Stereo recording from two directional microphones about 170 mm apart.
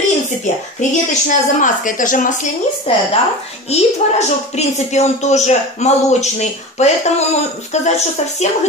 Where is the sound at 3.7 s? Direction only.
40° left (ahead or behind).